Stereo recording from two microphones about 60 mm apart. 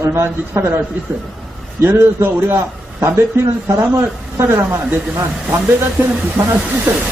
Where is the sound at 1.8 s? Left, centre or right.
Right.